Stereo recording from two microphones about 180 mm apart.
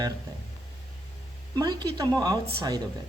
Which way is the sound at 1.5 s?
20° right (ahead or behind).